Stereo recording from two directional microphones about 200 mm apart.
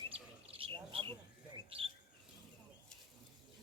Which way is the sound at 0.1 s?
25° right (ahead or behind).